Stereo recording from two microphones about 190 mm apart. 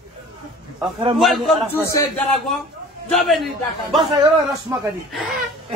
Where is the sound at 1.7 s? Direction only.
15° left (ahead or behind).